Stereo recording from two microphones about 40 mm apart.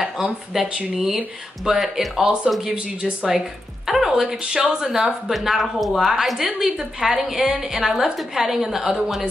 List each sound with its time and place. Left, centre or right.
0.0 s speech: centre
1.7 s a woman's voice: centre
4.1 s speech: centre
4.8 s a woman's voice: centre